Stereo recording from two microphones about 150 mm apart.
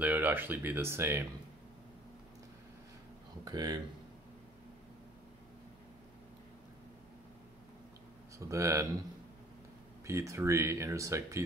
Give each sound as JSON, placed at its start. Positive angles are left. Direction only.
{"t": 0.0, "sound": "speech", "side_deg": -10}
{"t": 3.4, "sound": "speech", "side_deg": -25}
{"t": 8.4, "sound": "speech", "side_deg": -20}
{"t": 10.0, "sound": "speech", "side_deg": -20}